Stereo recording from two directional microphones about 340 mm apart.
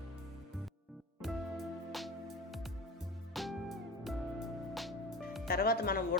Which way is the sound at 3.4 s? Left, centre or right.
Centre.